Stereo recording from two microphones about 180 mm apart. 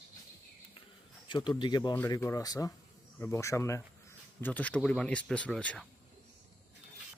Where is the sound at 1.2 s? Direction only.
25° left (ahead or behind); by 5.9 s 5° left (ahead or behind).